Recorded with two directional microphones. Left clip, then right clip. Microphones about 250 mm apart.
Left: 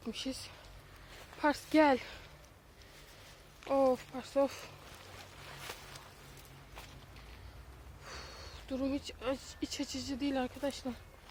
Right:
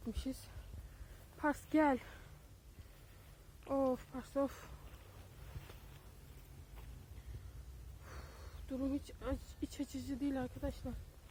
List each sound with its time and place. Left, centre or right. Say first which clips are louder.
0.0 s speech: left 5 dB; centre
1.4 s speech: left 6 dB; centre
3.7 s speech: left 7 dB; centre
8.0 s speech: left 8 dB; centre